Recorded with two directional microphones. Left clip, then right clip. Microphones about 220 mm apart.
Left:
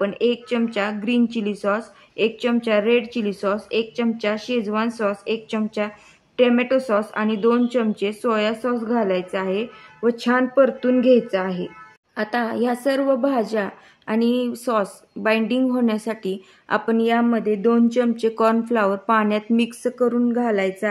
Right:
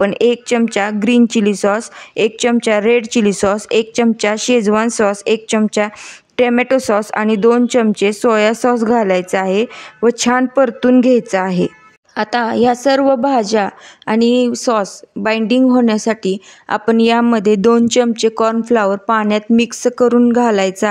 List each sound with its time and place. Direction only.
0.0 s a woman's voice: 45° right (ahead or behind)